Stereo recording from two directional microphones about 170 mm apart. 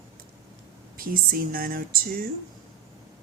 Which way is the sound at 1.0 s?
55° right (ahead or behind).